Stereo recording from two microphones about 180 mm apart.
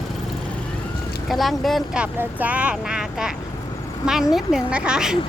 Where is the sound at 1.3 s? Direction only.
Centre (ahead or behind).